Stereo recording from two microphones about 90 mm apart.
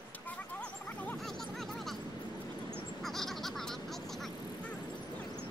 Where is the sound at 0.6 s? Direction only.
15° left (ahead or behind).